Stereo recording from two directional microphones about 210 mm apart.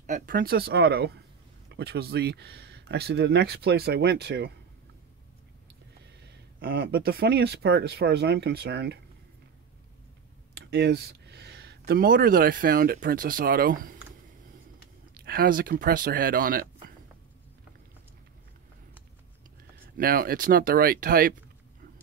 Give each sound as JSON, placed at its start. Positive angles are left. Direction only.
{"t": 0.0, "sound": "speech", "side_deg": -40}
{"t": 6.2, "sound": "speech", "side_deg": -50}
{"t": 10.5, "sound": "speech", "side_deg": -50}
{"t": 15.1, "sound": "speech", "side_deg": -45}
{"t": 19.7, "sound": "speech", "side_deg": -45}